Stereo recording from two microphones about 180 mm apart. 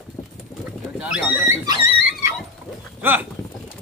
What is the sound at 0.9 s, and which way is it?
Speech, 5° right (ahead or behind).